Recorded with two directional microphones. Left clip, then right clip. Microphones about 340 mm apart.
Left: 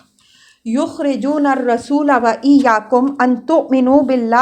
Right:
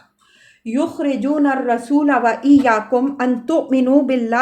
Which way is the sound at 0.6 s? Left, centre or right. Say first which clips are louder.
Left 2 dB; left.